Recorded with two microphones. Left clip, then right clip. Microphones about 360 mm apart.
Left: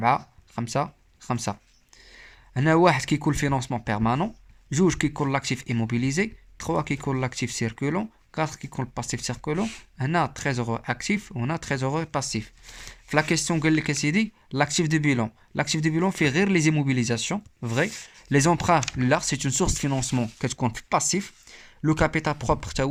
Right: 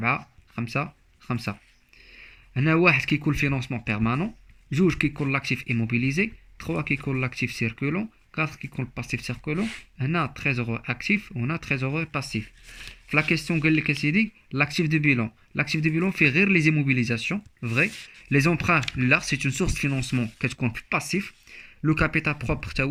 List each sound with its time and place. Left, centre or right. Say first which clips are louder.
0.0 s speech: left 4 dB; left